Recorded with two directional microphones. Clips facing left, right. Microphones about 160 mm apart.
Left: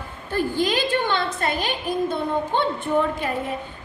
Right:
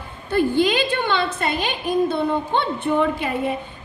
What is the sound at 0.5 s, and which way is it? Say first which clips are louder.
A woman's voice: right 3 dB; 70° right (ahead or behind).